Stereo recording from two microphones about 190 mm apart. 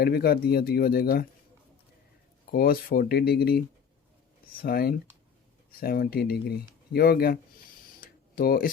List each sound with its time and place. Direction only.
0.0 s speech: 55° left (ahead or behind)
2.5 s speech: 55° left (ahead or behind)
4.6 s speech: 50° left (ahead or behind)
8.0 s a sound: 50° left (ahead or behind)